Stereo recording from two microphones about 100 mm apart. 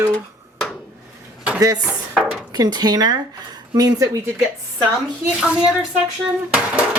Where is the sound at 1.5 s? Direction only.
40° right (ahead or behind).